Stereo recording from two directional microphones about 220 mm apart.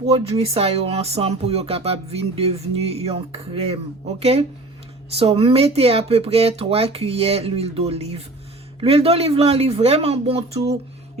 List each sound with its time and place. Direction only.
0.0 s speech: 25° right (ahead or behind)